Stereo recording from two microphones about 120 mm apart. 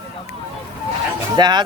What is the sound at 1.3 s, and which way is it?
Speech, 35° right (ahead or behind).